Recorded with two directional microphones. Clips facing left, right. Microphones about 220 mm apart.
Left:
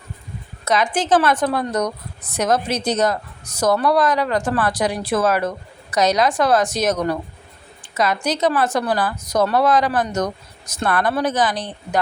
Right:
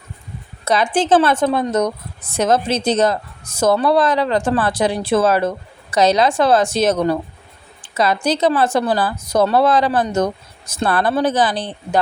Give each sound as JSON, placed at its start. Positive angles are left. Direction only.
{"t": 0.6, "sound": "speech", "side_deg": -30}